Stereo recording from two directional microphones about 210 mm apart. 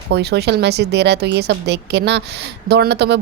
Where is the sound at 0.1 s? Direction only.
50° right (ahead or behind).